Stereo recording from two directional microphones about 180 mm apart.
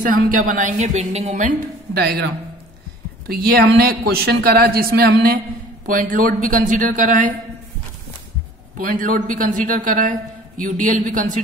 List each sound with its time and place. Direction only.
0.0 s a woman's voice: 50° right (ahead or behind)
2.0 s a woman's voice: 60° right (ahead or behind); by 7.3 s 45° right (ahead or behind)
8.7 s a woman's voice: 50° right (ahead or behind)